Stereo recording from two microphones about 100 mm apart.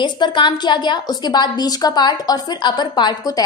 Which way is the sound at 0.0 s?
50° left (ahead or behind).